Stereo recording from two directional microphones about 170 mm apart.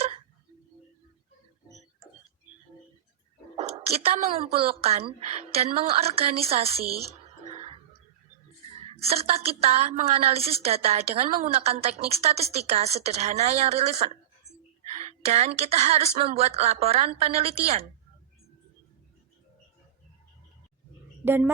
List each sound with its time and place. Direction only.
3.6 s a woman's voice: 35° right (ahead or behind)
7.4 s music: 35° right (ahead or behind)
9.0 s a woman's voice: 35° right (ahead or behind)
15.2 s a woman's voice: 40° right (ahead or behind)
21.2 s speech: 10° right (ahead or behind)